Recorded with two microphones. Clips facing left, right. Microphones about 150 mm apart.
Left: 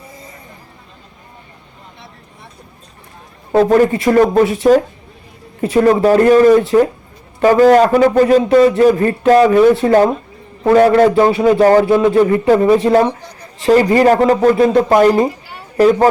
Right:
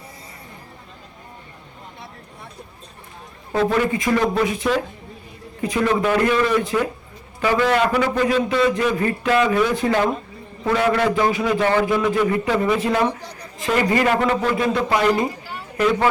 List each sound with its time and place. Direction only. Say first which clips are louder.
3.5 s a man's voice: left 9 dB; 40° left (ahead or behind)